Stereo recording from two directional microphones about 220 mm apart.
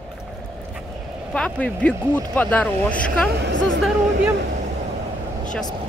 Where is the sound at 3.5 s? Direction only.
55° right (ahead or behind).